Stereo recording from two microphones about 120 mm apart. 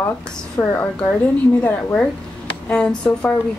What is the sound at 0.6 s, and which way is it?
Speech, 15° left (ahead or behind).